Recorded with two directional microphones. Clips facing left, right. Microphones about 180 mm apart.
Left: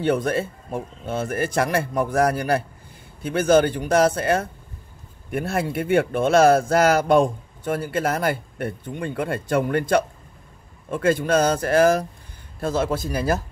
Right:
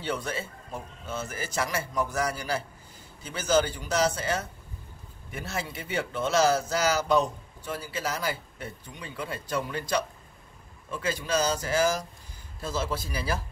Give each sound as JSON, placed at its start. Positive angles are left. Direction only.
{"t": 0.0, "sound": "speech", "side_deg": 55}